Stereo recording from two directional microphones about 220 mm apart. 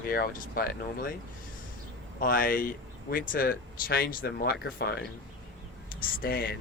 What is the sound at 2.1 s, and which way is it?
Speech, 40° left (ahead or behind).